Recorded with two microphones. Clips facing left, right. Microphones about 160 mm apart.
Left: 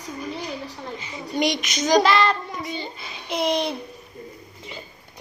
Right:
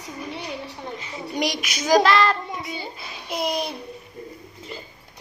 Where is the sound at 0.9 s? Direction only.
Centre (ahead or behind).